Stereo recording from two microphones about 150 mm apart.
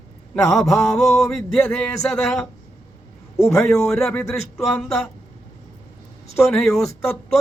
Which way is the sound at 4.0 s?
5° left (ahead or behind).